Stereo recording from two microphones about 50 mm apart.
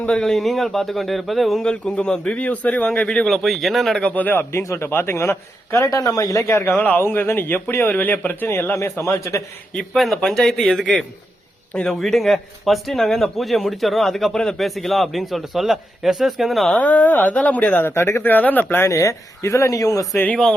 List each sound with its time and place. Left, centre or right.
0.1 s a man's voice: centre
1.6 s speech: left
2.4 s speech: left
3.2 s a man's voice: centre
4.1 s speech: left
4.6 s speech: left
4.9 s a man's voice: left
6.7 s speech: left
8.7 s a man's voice: left
9.7 s a man's voice: centre
11.9 s a man's voice: centre
16.8 s speech: left
17.8 s speech: left
18.8 s speech: left